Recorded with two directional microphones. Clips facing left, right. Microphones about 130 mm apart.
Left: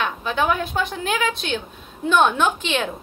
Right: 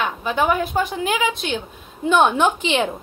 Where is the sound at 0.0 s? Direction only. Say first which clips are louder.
Right 2 dB; 10° right (ahead or behind).